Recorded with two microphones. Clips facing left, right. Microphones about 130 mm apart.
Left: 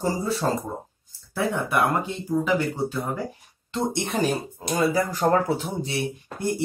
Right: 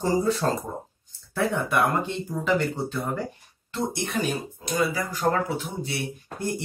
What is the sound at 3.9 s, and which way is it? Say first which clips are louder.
Speech: left 3 dB; 25° left (ahead or behind).